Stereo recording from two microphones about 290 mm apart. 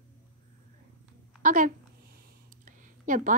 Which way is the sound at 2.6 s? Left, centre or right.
Right.